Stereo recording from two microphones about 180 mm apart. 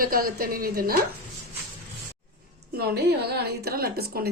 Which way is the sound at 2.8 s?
65° right (ahead or behind).